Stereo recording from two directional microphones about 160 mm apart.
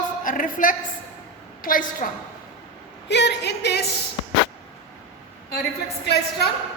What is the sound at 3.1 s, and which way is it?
Music, 90° left.